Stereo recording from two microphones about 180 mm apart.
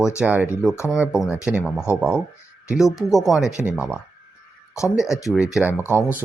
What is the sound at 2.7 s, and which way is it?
Speech, centre (ahead or behind).